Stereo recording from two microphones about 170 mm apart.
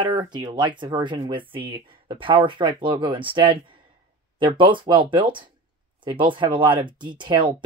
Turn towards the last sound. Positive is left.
turn(degrees=-30)  # may be behind; listen again after turning